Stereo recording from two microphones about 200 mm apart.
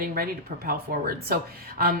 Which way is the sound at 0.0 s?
50° right (ahead or behind).